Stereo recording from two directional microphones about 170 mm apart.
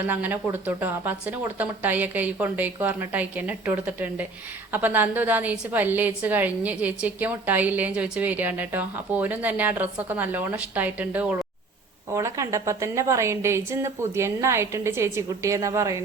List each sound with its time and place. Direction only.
0.0 s a woman's voice: 10° right (ahead or behind)